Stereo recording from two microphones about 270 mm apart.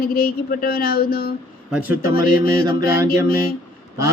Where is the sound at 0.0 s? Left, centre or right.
Left.